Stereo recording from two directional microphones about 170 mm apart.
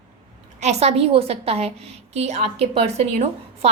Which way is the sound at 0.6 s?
40° right (ahead or behind).